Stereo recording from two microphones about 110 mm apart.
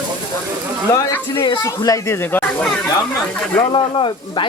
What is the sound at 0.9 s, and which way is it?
Speech, 30° left (ahead or behind).